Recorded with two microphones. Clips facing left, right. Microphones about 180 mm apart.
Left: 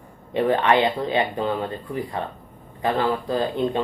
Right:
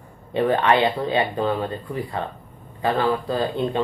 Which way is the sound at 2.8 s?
20° left (ahead or behind).